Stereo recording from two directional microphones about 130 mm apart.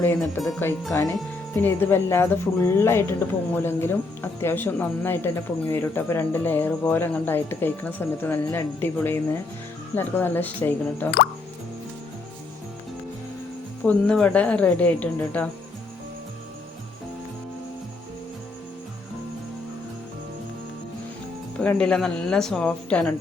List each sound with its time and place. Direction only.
0.2 s speech: centre (ahead or behind)
1.5 s speech: 15° left (ahead or behind)
13.8 s speech: 10° left (ahead or behind)
21.6 s speech: 10° left (ahead or behind)